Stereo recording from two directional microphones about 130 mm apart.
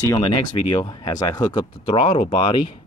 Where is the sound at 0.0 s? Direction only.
30° left (ahead or behind).